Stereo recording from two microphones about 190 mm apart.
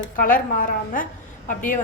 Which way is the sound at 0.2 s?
45° left (ahead or behind).